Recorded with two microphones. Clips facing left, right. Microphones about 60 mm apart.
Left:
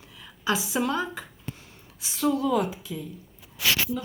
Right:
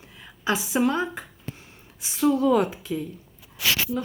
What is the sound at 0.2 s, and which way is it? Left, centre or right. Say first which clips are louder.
A woman's voice: right 1 dB; right.